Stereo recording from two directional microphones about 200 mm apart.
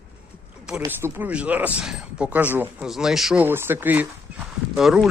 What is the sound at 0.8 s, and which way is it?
Speech, 10° right (ahead or behind).